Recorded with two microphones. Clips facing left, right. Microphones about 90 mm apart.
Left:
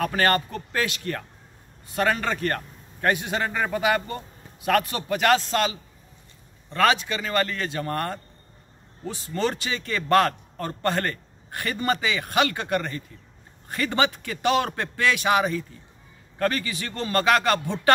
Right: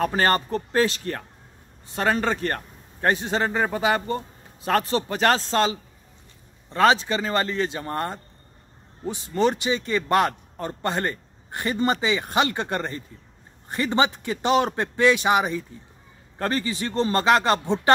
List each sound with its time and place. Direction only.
0.0 s a man's voice: 25° right (ahead or behind)